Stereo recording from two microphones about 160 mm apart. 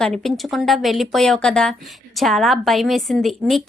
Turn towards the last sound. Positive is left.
turn(degrees=0)  # may be behind; listen again after turning